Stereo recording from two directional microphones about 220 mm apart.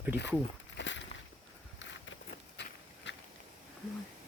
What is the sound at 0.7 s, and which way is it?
Walk, 55° left (ahead or behind).